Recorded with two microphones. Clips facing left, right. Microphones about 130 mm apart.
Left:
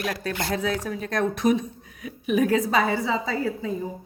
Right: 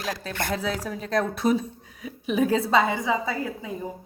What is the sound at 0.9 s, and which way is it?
A woman's voice, 30° right (ahead or behind).